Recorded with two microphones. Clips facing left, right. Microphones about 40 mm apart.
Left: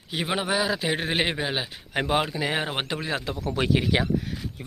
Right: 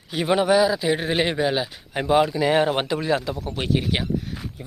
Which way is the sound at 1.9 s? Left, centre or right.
Left.